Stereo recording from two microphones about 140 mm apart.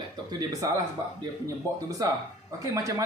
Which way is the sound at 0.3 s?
25° right (ahead or behind).